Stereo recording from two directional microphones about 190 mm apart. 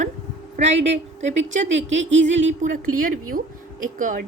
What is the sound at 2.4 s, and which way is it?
A woman's voice, 40° right (ahead or behind).